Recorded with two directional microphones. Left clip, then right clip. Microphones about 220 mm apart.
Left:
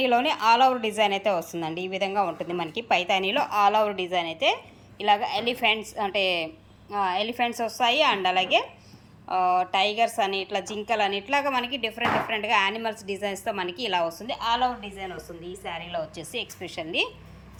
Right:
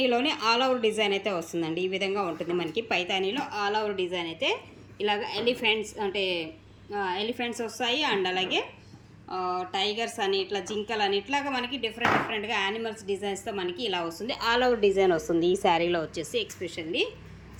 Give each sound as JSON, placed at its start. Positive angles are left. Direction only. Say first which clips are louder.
{"t": 0.0, "sound": "a woman's voice", "louder": "left 3 dB", "side_deg": 0}
{"t": 16.1, "sound": "a woman's voice", "louder": "right 3 dB", "side_deg": 0}